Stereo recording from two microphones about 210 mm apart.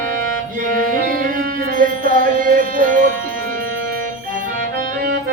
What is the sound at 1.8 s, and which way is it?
Music, 40° right (ahead or behind).